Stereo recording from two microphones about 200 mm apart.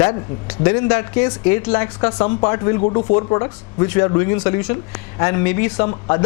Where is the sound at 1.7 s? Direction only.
20° left (ahead or behind).